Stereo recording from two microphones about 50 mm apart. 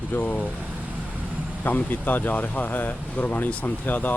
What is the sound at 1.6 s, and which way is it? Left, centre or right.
Speech, left.